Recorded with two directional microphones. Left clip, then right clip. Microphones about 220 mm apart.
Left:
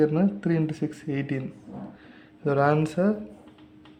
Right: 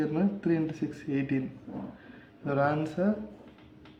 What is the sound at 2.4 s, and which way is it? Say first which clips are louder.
Speech: left 6 dB; 50° left (ahead or behind).